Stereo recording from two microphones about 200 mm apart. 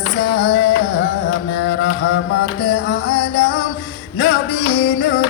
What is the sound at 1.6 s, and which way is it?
Mantra, 50° left (ahead or behind).